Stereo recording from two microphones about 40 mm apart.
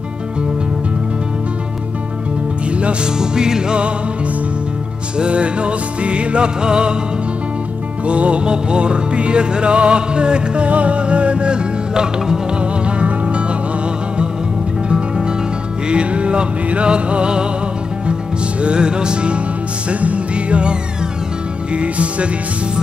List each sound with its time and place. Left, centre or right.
2.7 s music: right
3.2 s music: centre
5.2 s music: right
8.1 s music: right
12.8 s music: right
14.9 s music: right
18.6 s music: right
21.7 s music: right